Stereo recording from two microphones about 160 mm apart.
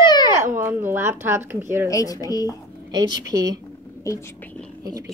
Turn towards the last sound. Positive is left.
turn(degrees=-25)  # may be behind; listen again after turning